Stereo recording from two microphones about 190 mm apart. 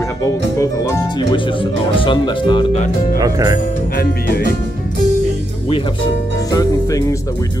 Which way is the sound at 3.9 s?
55° left (ahead or behind).